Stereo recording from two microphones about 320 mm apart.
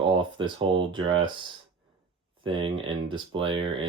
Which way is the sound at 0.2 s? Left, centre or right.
Centre.